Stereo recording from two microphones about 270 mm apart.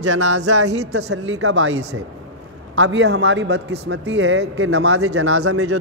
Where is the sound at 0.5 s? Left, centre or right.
Right.